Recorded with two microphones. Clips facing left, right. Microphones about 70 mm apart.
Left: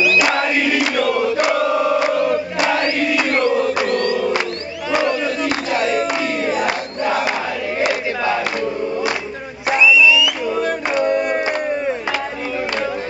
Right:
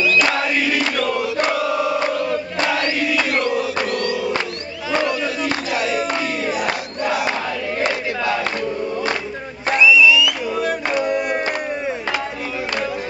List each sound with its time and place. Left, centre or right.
0.2 s crowd: centre
1.0 s a sound: centre
1.4 s chant: centre
2.0 s choir: centre
2.7 s a sound: centre
3.8 s music: centre
4.9 s crowd: centre
9.8 s music: centre